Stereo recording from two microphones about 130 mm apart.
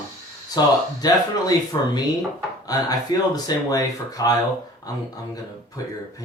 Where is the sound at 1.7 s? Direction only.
30° left (ahead or behind).